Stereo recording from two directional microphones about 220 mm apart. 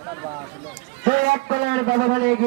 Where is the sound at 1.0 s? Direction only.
40° right (ahead or behind).